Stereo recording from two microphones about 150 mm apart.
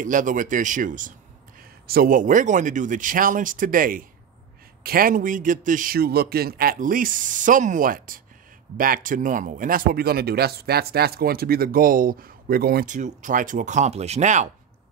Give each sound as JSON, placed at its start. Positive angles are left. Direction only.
{"t": 0.0, "sound": "a man's voice", "side_deg": -60}
{"t": 1.6, "sound": "a man's voice", "side_deg": -80}